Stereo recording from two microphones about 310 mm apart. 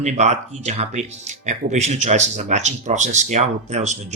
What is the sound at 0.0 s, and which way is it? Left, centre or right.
Speech, right.